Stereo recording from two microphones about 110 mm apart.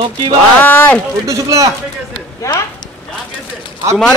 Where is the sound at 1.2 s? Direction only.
30° right (ahead or behind).